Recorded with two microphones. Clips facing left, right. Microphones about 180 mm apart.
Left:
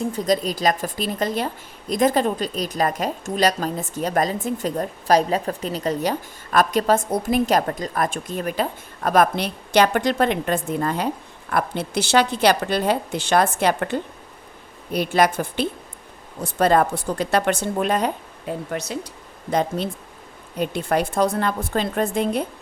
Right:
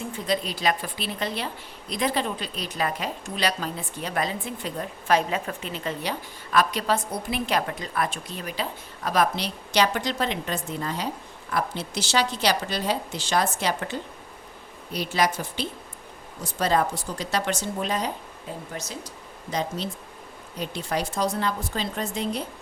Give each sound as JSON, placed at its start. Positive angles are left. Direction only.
{"t": 0.0, "sound": "a woman's voice", "side_deg": 40}